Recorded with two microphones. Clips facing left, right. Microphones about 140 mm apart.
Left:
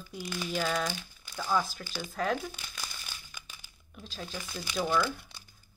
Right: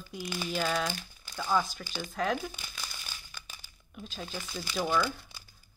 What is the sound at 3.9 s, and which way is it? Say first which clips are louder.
Speech: right 1 dB; centre (ahead or behind).